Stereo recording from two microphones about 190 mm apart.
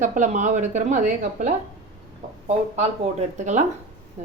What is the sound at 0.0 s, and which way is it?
Speech, 40° right (ahead or behind).